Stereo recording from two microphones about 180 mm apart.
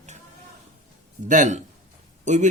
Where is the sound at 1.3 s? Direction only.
45° right (ahead or behind).